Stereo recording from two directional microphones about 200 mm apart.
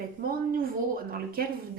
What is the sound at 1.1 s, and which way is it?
Speech, 45° right (ahead or behind).